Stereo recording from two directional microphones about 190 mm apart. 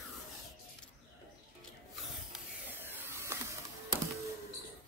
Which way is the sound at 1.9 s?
5° right (ahead or behind).